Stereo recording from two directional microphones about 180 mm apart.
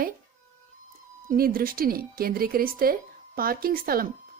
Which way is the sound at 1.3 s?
55° right (ahead or behind).